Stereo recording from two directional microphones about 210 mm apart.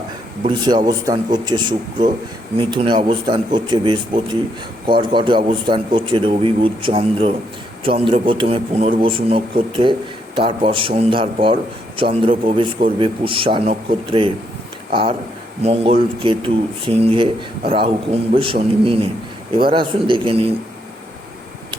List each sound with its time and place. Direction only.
0.4 s a man's voice: 20° right (ahead or behind)
15.6 s a man's voice: 25° right (ahead or behind)